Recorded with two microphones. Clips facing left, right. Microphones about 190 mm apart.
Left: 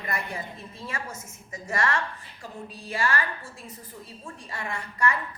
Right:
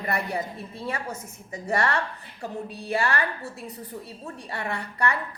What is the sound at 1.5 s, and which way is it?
Speech, 35° right (ahead or behind).